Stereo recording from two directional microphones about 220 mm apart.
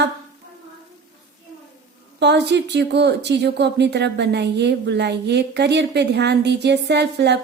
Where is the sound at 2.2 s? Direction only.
50° right (ahead or behind).